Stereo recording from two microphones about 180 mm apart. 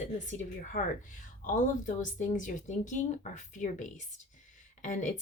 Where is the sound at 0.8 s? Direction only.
50° left (ahead or behind).